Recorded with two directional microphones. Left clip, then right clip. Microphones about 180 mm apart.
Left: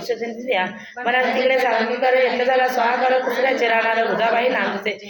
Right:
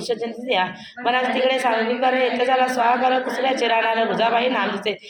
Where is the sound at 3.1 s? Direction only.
40° right (ahead or behind).